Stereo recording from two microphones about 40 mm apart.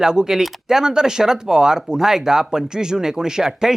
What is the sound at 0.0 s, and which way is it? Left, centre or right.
Speech, centre.